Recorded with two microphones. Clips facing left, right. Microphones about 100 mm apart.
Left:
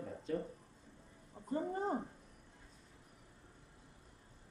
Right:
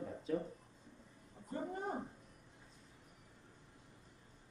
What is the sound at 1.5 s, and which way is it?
Speech, 30° left (ahead or behind).